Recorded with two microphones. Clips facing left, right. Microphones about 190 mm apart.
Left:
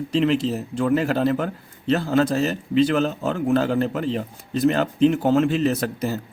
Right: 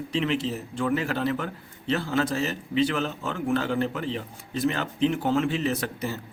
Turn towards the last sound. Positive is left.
turn(degrees=40)  # may be behind; listen again after turning